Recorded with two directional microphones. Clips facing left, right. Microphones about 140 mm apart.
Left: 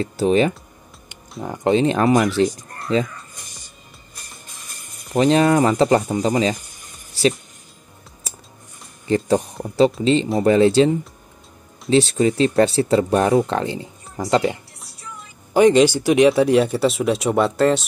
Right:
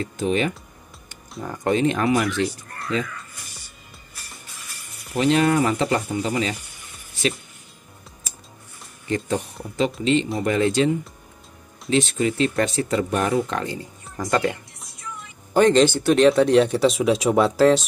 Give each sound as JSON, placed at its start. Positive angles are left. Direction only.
{"t": 0.0, "sound": "speech", "side_deg": 35}
{"t": 1.4, "sound": "speech", "side_deg": 20}
{"t": 5.1, "sound": "speech", "side_deg": 35}
{"t": 9.0, "sound": "speech", "side_deg": 35}